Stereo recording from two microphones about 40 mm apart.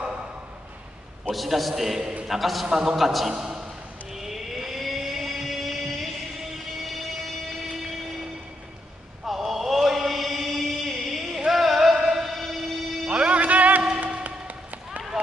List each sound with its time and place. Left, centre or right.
1.3 s a man's voice: centre
2.6 s a man's voice: centre
3.0 s a man's voice: centre
3.3 s a sound: centre
4.1 s vehicle: centre
6.8 s a sound: centre
9.2 s chant: centre
11.5 s music: centre
13.1 s music: right
13.9 s a sound: right